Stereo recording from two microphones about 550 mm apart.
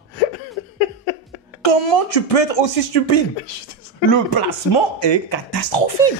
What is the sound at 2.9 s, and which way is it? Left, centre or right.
Speech, left.